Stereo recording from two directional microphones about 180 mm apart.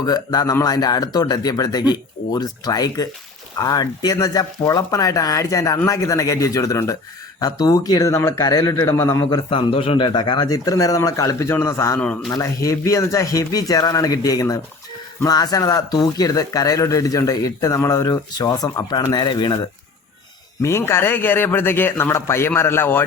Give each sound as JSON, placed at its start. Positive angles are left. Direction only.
{"t": 0.0, "sound": "speech", "side_deg": 20}
{"t": 9.5, "sound": "speech", "side_deg": 30}
{"t": 12.3, "sound": "speech", "side_deg": 20}
{"t": 20.6, "sound": "a man's voice", "side_deg": 15}